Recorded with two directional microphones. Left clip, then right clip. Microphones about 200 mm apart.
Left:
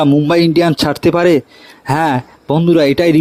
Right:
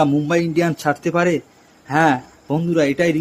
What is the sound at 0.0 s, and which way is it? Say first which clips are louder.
Speech: left 6 dB; 35° left (ahead or behind).